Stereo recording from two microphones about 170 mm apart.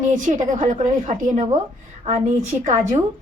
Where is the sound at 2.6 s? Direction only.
45° right (ahead or behind).